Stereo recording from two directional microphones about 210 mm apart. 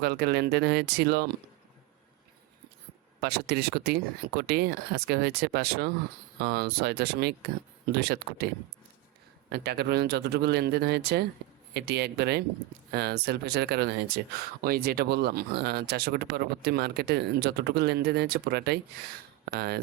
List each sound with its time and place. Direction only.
0.0 s speech: 50° right (ahead or behind)
3.2 s speech: 50° right (ahead or behind)
9.5 s speech: 50° right (ahead or behind)